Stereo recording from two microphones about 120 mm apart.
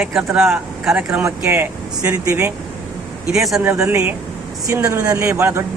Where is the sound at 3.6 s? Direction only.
20° right (ahead or behind).